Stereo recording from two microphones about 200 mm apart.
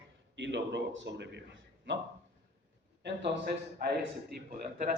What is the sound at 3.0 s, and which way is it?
Speech, 55° right (ahead or behind).